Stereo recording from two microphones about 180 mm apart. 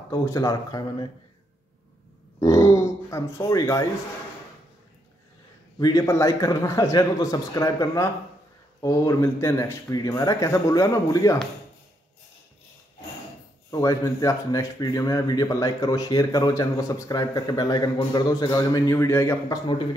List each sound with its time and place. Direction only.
0.1 s speech: 20° left (ahead or behind)
2.4 s speech: 15° left (ahead or behind)
5.8 s speech: 20° left (ahead or behind)
13.7 s speech: 20° left (ahead or behind)